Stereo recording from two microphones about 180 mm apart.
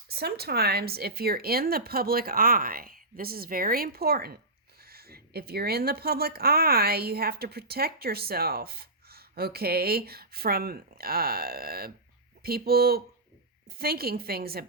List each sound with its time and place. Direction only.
0.1 s speech: 60° right (ahead or behind)